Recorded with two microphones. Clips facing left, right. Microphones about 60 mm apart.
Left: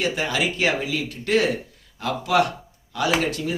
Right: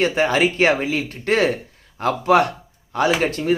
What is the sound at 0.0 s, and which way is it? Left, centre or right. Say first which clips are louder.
A man's voice: right 6 dB; right.